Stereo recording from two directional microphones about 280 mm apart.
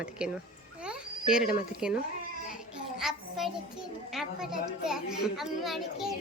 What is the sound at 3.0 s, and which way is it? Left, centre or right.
Child singing, centre.